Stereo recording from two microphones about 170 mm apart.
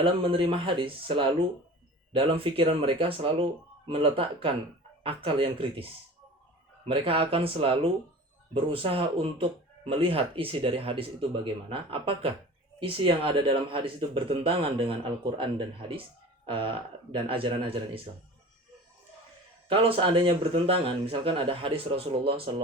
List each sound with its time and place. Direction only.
0.0 s speech: 30° right (ahead or behind)
6.8 s speech: 35° right (ahead or behind)
19.6 s speech: 30° right (ahead or behind)